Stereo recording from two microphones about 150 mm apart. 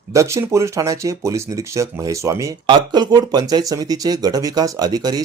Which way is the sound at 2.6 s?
30° right (ahead or behind).